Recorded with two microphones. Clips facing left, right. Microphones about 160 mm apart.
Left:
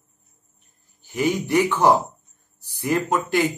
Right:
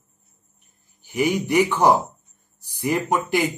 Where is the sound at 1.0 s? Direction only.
15° right (ahead or behind).